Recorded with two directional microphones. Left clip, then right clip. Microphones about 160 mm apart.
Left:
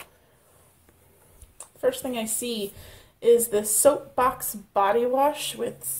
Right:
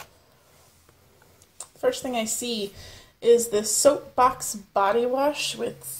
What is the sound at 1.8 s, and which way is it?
A woman's voice, 10° left (ahead or behind).